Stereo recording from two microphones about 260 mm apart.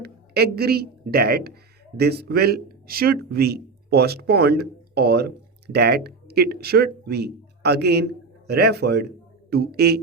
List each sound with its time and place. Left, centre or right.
0.0 s speech: right